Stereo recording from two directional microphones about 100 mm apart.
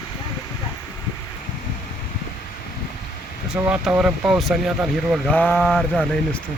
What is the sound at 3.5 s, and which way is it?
Speech, 10° right (ahead or behind).